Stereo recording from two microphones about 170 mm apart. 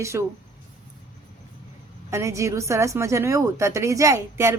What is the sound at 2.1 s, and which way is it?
A woman's voice, 15° right (ahead or behind).